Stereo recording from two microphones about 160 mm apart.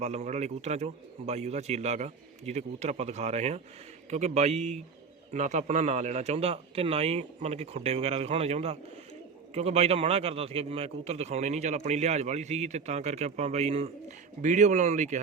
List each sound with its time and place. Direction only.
0.0 s a man's voice: 45° right (ahead or behind)